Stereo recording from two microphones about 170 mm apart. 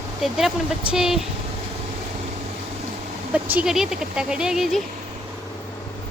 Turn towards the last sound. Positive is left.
turn(degrees=0)  # may be behind; listen again after turning